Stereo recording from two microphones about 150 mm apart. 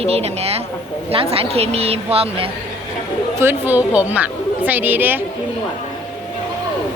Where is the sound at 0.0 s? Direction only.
45° right (ahead or behind).